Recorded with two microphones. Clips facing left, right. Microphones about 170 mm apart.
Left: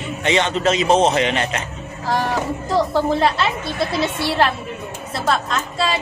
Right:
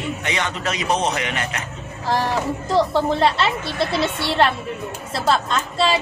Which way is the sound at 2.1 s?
Centre (ahead or behind).